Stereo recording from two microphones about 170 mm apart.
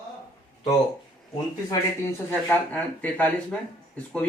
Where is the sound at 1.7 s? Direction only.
15° left (ahead or behind).